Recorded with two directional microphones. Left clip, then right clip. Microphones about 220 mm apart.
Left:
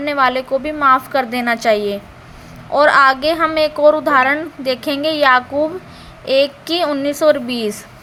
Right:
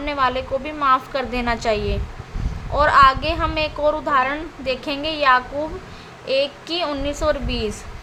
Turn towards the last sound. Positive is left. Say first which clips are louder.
# left 7 dB
turn(degrees=20)  # may be behind; listen again after turning